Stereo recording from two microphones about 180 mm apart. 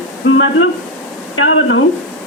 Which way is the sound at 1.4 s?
90° left.